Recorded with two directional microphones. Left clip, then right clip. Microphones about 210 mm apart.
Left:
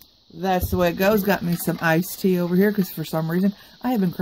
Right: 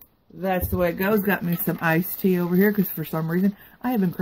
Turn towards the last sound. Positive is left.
turn(degrees=15)  # may be behind; listen again after turning